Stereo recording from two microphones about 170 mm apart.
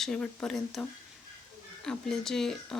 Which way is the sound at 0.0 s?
5° left (ahead or behind).